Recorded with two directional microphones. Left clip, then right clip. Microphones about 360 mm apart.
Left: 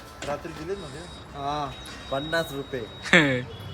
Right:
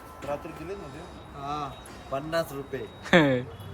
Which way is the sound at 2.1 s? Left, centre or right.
Centre.